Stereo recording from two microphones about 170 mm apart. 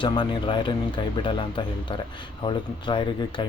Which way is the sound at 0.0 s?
30° left (ahead or behind).